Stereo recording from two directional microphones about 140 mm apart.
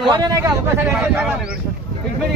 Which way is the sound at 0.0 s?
25° right (ahead or behind).